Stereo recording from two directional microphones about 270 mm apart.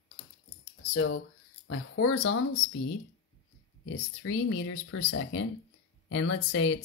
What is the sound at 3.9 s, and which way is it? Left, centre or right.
Speech, left.